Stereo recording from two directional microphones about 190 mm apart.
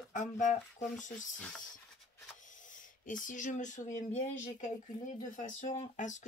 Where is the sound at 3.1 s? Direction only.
45° left (ahead or behind).